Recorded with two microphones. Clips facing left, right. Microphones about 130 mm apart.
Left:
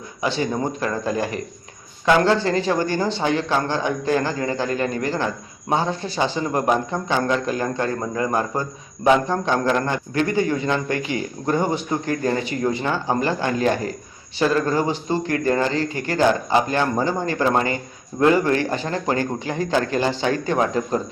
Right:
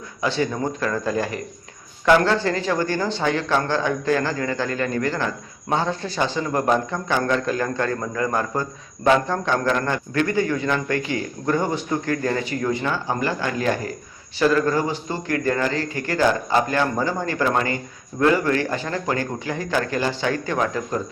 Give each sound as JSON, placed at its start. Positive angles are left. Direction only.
{"t": 0.2, "sound": "a man's voice", "side_deg": 15}